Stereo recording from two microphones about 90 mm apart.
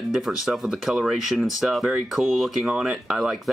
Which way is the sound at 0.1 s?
5° right (ahead or behind).